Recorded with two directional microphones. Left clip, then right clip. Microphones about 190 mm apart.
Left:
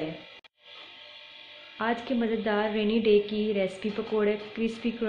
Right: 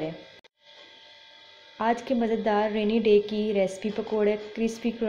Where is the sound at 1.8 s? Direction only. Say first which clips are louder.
Right 3 dB; 15° right (ahead or behind).